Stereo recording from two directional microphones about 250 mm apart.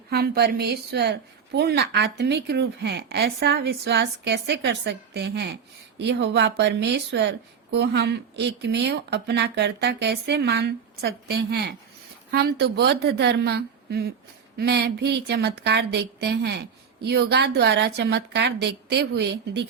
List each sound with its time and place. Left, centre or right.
0.1 s a woman's voice: right